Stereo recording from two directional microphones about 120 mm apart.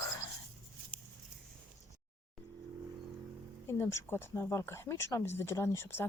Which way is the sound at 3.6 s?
20° left (ahead or behind).